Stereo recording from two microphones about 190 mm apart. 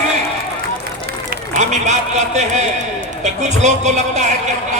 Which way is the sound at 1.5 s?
40° right (ahead or behind).